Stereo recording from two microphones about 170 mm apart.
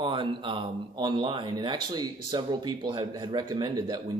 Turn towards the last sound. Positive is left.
turn(degrees=-25)  # may be behind; listen again after turning